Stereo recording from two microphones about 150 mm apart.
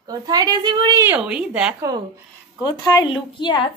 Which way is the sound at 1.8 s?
25° right (ahead or behind).